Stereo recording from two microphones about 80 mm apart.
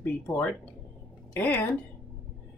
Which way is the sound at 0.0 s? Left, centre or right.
Left.